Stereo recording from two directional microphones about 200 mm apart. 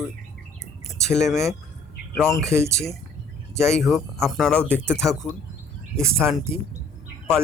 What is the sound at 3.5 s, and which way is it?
Speech, 5° left (ahead or behind).